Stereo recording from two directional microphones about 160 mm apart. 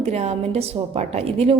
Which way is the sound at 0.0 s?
40° right (ahead or behind).